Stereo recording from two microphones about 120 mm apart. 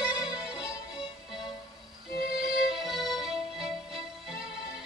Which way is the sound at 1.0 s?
40° left (ahead or behind).